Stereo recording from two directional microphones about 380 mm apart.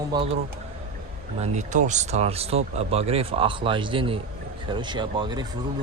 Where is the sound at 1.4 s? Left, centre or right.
Centre.